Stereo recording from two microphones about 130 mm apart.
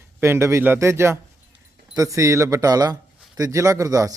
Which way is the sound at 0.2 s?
20° right (ahead or behind).